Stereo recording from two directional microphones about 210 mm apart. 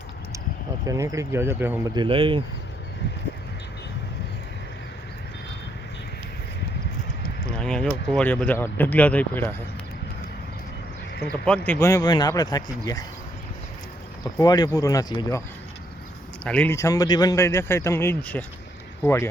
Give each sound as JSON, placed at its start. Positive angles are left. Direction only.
{"t": 0.9, "sound": "speech", "side_deg": -15}
{"t": 2.0, "sound": "speech", "side_deg": -25}
{"t": 7.4, "sound": "speech", "side_deg": 5}
{"t": 11.3, "sound": "speech", "side_deg": 5}
{"t": 14.3, "sound": "speech", "side_deg": 20}
{"t": 16.4, "sound": "speech", "side_deg": 5}